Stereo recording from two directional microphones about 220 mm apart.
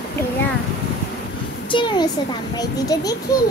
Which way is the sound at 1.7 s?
20° left (ahead or behind).